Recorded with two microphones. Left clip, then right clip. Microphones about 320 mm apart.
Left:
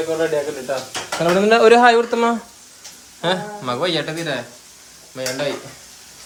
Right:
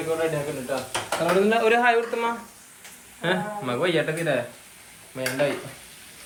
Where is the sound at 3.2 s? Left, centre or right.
Centre.